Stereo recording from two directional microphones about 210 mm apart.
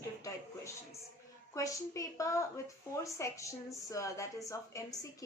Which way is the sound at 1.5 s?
15° left (ahead or behind).